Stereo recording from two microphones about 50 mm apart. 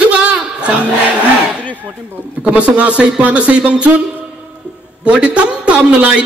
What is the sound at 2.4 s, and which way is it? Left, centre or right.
A man's voice, right.